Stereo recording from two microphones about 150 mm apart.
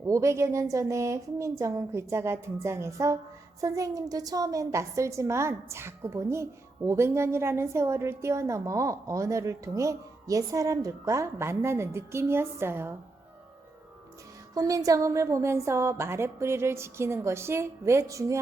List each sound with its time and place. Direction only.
0.0 s a woman's voice: 20° right (ahead or behind)
14.5 s a woman's voice: 25° right (ahead or behind)